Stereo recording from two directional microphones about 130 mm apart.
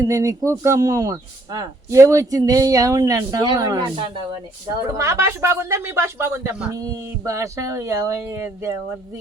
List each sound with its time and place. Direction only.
0.0 s speech: 25° right (ahead or behind)
4.9 s speech: 20° right (ahead or behind)